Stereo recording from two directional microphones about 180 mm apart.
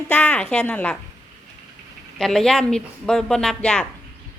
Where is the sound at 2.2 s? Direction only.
Centre (ahead or behind).